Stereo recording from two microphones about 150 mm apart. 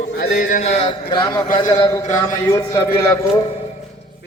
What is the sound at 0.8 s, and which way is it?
A man's voice, 30° left (ahead or behind).